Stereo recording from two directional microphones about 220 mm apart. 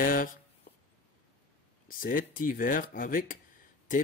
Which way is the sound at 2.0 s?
40° left (ahead or behind).